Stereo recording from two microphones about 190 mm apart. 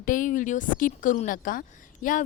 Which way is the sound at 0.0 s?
45° left (ahead or behind).